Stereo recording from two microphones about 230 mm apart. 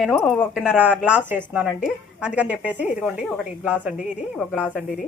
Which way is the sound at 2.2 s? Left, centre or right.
Centre.